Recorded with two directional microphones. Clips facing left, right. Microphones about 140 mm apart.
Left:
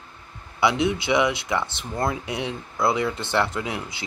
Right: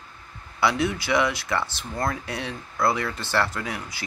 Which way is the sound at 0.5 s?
20° left (ahead or behind).